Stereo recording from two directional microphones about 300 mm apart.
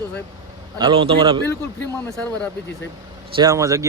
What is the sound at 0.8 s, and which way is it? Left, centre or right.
Speech, centre.